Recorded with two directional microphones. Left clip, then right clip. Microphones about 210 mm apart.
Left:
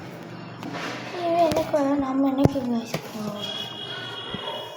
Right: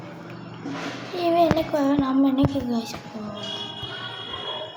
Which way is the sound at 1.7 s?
5° right (ahead or behind).